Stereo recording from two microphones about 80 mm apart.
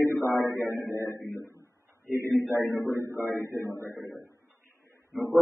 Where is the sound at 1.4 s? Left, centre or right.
Right.